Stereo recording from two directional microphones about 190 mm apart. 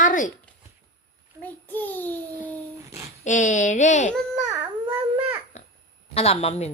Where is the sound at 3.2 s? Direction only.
40° left (ahead or behind).